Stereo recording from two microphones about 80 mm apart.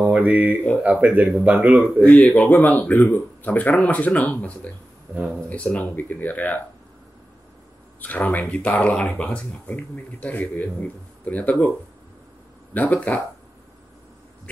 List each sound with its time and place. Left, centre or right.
0.0 s speech: centre
1.8 s speech: centre
5.1 s speech: centre
5.5 s speech: centre
8.3 s speech: centre
12.7 s speech: left